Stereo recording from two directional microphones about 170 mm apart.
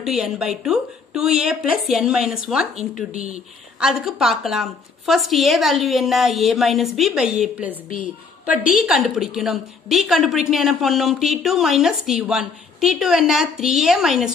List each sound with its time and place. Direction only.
0.0 s a woman's voice: 5° right (ahead or behind)
8.7 s a woman's voice: centre (ahead or behind)